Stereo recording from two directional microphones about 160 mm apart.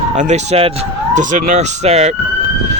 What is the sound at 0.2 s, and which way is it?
Speech, 40° right (ahead or behind).